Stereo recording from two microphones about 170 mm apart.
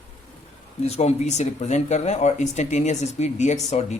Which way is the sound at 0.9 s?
40° left (ahead or behind).